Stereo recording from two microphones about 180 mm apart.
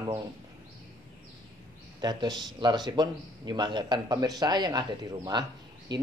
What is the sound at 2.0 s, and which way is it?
A man's voice, 25° right (ahead or behind).